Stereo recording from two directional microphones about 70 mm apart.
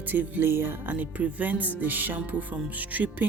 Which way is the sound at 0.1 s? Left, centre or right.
Right.